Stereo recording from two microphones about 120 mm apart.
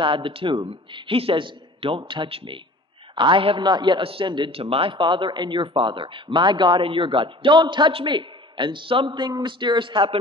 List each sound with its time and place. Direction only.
0.0 s a man's voice: 45° right (ahead or behind)
5.7 s a man's voice: 50° right (ahead or behind)